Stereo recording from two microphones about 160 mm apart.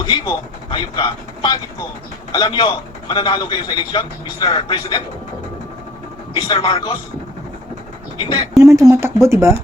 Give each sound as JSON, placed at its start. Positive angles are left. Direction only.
{"t": 0.0, "sound": "a man's voice", "side_deg": 30}
{"t": 6.3, "sound": "speech", "side_deg": 35}
{"t": 8.2, "sound": "a man's voice", "side_deg": 30}
{"t": 8.6, "sound": "speech", "side_deg": -20}